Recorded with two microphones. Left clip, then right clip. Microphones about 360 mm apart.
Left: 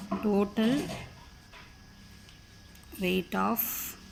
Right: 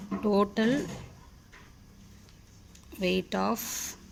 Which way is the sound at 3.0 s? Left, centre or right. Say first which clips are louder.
Right 1 dB; right.